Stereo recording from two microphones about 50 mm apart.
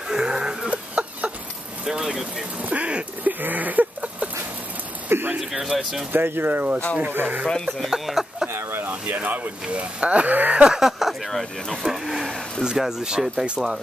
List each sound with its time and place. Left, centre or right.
0.1 s a sound: centre
2.6 s speech: right
3.3 s a sound: right
5.4 s speech: centre
6.1 s speech: right
7.5 s speech: centre
7.9 s a sound: centre
8.5 s speech: right
10.6 s speech: centre
11.9 s speech: centre
12.3 s speech: centre
12.6 s speech: centre